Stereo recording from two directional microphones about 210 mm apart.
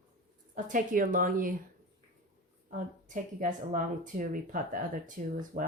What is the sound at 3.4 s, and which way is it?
Speech, 35° right (ahead or behind).